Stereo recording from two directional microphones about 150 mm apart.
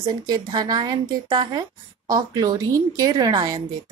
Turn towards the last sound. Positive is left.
turn(degrees=-25)  # may be behind; listen again after turning